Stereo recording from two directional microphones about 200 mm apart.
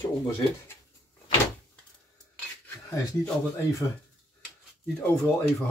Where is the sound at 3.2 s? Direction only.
15° left (ahead or behind).